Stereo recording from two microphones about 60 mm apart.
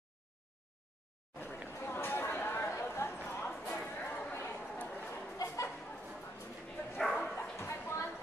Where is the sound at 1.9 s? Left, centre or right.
Left.